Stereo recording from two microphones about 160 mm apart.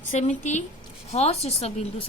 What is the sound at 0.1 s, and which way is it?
A woman's voice, 45° left (ahead or behind).